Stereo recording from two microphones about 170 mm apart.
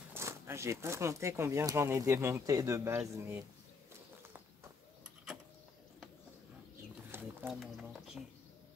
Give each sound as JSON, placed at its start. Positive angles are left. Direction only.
{"t": 0.1, "sound": "speech", "side_deg": -15}
{"t": 7.1, "sound": "a sound", "side_deg": -15}
{"t": 7.4, "sound": "speech", "side_deg": 0}